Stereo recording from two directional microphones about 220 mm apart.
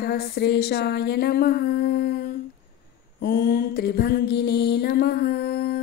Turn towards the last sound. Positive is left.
turn(degrees=45)  # may be behind; listen again after turning